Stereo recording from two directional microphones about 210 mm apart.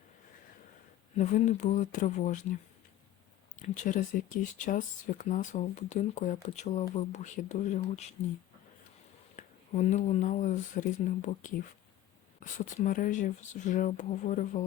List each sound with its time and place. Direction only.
1.1 s speech: 35° left (ahead or behind)
3.6 s speech: 40° left (ahead or behind)
9.3 s speech: 35° left (ahead or behind)